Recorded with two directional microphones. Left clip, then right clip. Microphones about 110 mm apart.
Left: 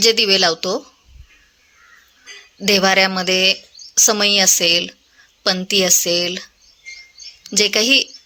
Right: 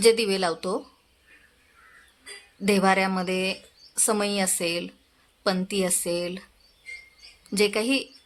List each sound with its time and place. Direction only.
0.0 s speech: 20° left (ahead or behind)
2.6 s speech: 20° left (ahead or behind)
7.5 s speech: 20° left (ahead or behind)